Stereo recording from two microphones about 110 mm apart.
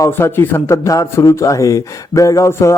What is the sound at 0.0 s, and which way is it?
A man's voice, 20° left (ahead or behind).